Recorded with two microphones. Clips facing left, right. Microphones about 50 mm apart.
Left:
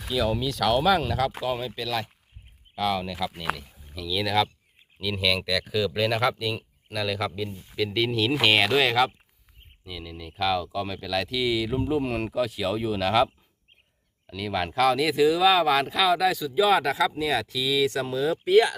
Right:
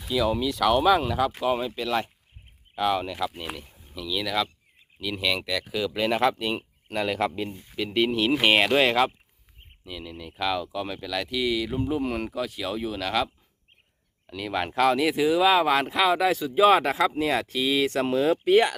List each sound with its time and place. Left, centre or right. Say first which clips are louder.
0.1 s a man's voice: right 1 dB; centre; by 7.5 s right
7.5 s speech: even; centre
9.8 s speech: right 1 dB; centre
14.3 s speech: even; centre; by 18.0 s right
18.0 s speech: right 3 dB; right